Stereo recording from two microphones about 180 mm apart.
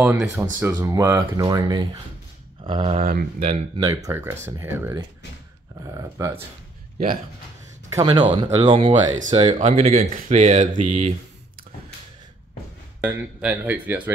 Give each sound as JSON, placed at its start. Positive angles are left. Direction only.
{"t": 0.0, "sound": "speech", "side_deg": -10}
{"t": 3.1, "sound": "speech", "side_deg": -55}
{"t": 3.7, "sound": "speech", "side_deg": -20}
{"t": 6.2, "sound": "speech", "side_deg": -15}
{"t": 7.9, "sound": "speech", "side_deg": -20}
{"t": 9.9, "sound": "speech", "side_deg": -50}
{"t": 13.0, "sound": "speech", "side_deg": -10}